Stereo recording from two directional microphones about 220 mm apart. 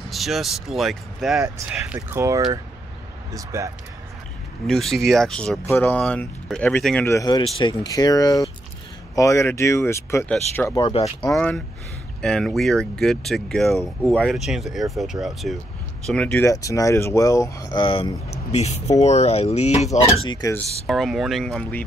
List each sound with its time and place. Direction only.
0.1 s speech: centre (ahead or behind)
4.6 s speech: centre (ahead or behind)
10.8 s speech: 25° left (ahead or behind)
11.3 s speech: 5° left (ahead or behind); by 20.1 s 30° left (ahead or behind)
20.2 s speech: 15° left (ahead or behind)
20.8 s speech: centre (ahead or behind)